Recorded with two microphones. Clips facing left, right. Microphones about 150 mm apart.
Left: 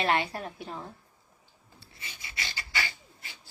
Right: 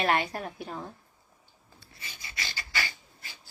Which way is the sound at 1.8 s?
25° left (ahead or behind).